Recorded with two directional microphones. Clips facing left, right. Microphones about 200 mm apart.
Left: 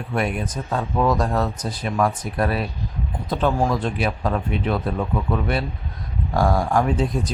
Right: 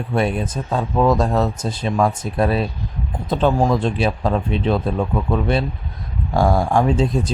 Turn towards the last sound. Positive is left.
turn(degrees=-25)  # may be behind; listen again after turning